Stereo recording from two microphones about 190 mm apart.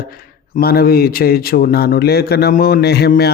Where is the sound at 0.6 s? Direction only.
55° left (ahead or behind).